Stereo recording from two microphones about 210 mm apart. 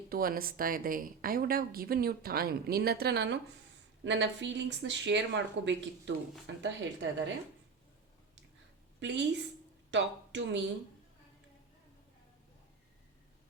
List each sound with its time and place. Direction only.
0.1 s a woman's voice: 45° right (ahead or behind); by 7.3 s 60° right (ahead or behind)
9.0 s a woman's voice: 55° right (ahead or behind)